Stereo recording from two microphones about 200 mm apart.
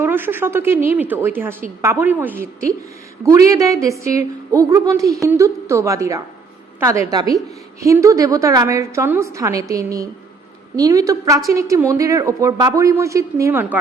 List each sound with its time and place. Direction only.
0.0 s a woman's voice: 10° right (ahead or behind)